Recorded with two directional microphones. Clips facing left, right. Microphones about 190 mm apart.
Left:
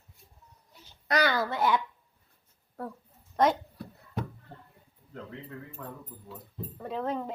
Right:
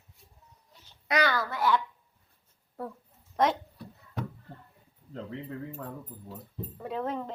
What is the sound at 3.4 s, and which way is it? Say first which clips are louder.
Speech: left 2 dB; centre (ahead or behind).